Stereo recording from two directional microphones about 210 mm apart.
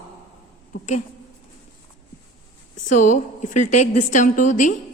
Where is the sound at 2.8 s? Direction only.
35° left (ahead or behind).